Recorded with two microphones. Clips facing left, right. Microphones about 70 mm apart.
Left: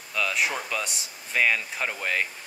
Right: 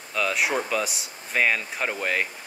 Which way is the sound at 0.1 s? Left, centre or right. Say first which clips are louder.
Right 2 dB; centre.